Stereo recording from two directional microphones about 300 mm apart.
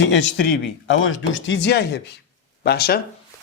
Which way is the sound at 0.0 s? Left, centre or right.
Left.